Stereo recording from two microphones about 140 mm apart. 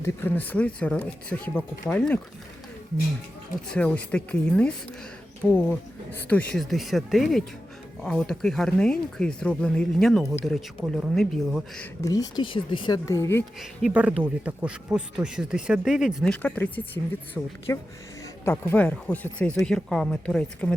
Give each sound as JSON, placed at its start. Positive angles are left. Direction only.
{"t": 0.0, "sound": "speech", "side_deg": 15}
{"t": 3.7, "sound": "speech", "side_deg": 10}
{"t": 12.0, "sound": "speech", "side_deg": 25}
{"t": 13.1, "sound": "speech", "side_deg": 20}
{"t": 13.6, "sound": "speech", "side_deg": -5}
{"t": 16.2, "sound": "speech", "side_deg": 10}